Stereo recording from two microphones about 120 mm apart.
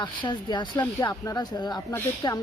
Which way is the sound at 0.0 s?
40° left (ahead or behind).